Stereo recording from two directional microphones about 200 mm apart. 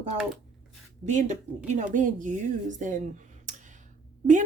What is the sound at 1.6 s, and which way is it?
A woman's voice, 40° right (ahead or behind).